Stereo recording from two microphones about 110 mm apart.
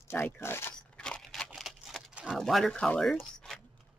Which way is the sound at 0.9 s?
10° left (ahead or behind).